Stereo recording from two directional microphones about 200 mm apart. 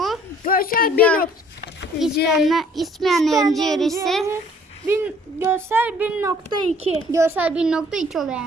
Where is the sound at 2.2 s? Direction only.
Centre (ahead or behind).